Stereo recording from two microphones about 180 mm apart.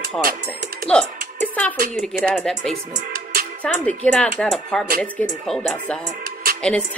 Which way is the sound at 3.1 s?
60° right (ahead or behind).